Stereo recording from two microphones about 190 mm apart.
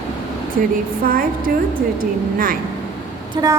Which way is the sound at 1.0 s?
50° right (ahead or behind).